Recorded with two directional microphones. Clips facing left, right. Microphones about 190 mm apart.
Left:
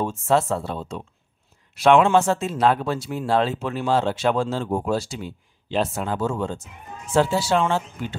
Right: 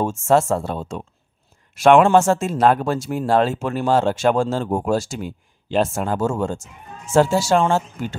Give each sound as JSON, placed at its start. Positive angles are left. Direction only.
{"t": 0.0, "sound": "speech", "side_deg": -45}